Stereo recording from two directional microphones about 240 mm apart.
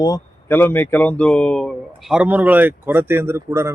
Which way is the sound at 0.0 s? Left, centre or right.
Centre.